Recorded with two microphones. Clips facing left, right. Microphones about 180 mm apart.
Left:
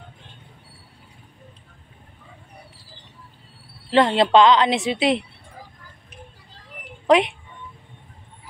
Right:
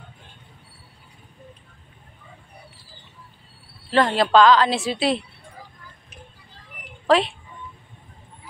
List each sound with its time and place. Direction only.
3.9 s a woman's voice: 20° left (ahead or behind)
7.1 s speech: 20° left (ahead or behind)